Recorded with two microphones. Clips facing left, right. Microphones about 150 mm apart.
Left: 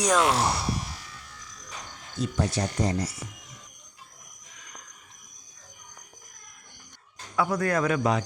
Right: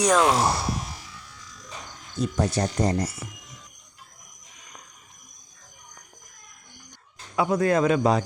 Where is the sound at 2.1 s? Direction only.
45° right (ahead or behind).